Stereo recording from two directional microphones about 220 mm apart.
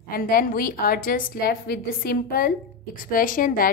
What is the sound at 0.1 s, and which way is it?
Speech, 40° left (ahead or behind).